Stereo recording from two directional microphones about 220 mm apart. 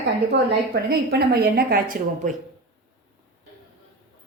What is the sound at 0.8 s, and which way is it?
A woman's voice, 45° right (ahead or behind).